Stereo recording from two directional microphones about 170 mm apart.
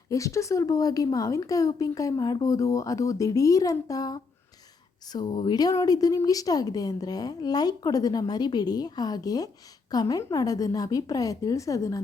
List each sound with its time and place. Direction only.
0.1 s a woman's voice: 20° left (ahead or behind)